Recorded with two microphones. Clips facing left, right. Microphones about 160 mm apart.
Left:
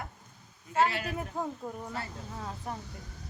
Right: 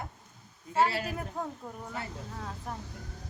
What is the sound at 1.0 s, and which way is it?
Speech, centre (ahead or behind).